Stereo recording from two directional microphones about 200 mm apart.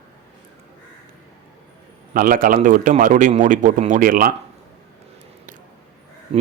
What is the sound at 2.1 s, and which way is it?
A man's voice, 45° right (ahead or behind).